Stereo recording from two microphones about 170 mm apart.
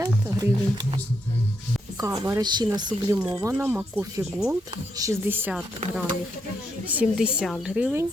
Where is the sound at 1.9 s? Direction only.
20° right (ahead or behind).